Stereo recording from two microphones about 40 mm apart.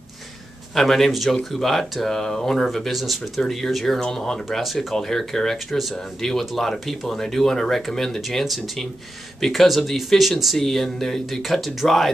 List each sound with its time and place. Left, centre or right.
0.7 s speech: centre
3.3 s speech: centre
4.5 s speech: centre
4.9 s speech: centre
9.4 s speech: centre